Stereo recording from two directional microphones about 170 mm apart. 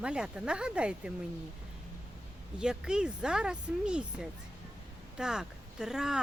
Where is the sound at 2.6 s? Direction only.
5° right (ahead or behind).